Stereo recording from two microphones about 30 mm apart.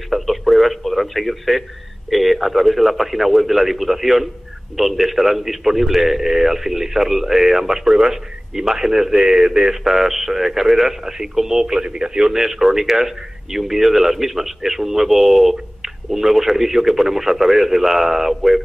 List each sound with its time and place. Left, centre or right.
0.1 s radio: centre
2.0 s a man's voice: centre; by 12.3 s right
12.3 s speech: centre